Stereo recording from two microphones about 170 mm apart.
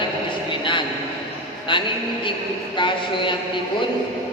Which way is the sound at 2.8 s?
30° left (ahead or behind).